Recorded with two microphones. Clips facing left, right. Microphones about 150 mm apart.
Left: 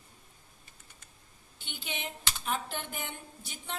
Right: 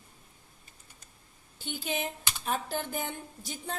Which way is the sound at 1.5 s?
40° right (ahead or behind).